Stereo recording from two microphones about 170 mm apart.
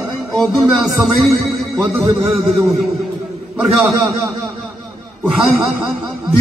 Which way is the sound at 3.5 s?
Centre (ahead or behind).